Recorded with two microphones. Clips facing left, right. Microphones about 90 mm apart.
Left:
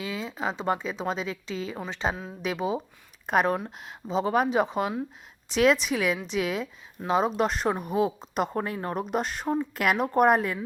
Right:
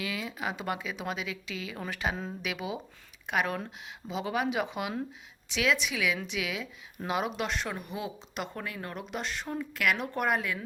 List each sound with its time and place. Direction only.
0.0 s a woman's voice: 30° left (ahead or behind)